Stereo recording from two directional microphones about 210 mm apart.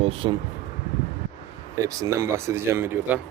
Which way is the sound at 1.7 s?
15° right (ahead or behind).